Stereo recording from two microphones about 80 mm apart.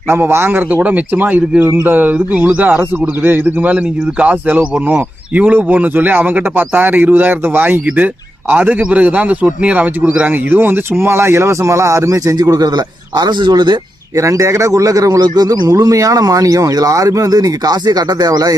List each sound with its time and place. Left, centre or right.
0.1 s speech: right
14.2 s a man's voice: right